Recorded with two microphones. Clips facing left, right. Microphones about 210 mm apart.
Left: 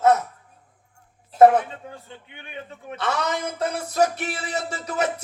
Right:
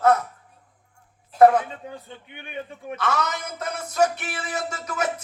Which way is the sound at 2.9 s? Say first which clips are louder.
Left 1 dB; 30° left (ahead or behind).